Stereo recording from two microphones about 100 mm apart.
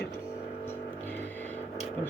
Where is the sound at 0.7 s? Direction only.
20° left (ahead or behind).